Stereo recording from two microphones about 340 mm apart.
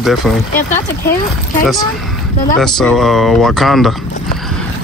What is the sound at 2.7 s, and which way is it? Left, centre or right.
Speech, centre.